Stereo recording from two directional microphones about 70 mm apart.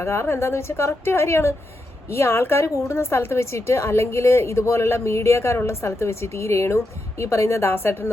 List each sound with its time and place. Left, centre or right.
0.0 s a woman's voice: left